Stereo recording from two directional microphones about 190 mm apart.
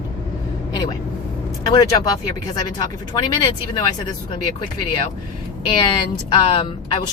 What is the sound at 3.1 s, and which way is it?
Speech, 25° left (ahead or behind).